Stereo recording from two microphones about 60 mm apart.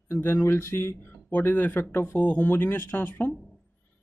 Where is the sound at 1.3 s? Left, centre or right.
Left.